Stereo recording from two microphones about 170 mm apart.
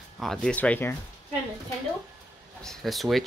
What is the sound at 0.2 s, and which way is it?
Speech, centre (ahead or behind).